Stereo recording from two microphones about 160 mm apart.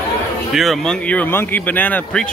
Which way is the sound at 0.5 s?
Centre (ahead or behind).